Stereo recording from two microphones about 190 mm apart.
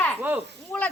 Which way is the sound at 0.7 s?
10° left (ahead or behind).